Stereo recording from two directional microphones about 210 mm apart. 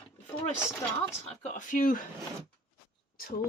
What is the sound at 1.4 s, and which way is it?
Speech, 35° left (ahead or behind).